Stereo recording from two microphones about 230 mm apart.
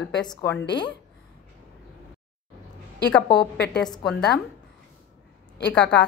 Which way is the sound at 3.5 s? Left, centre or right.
Left.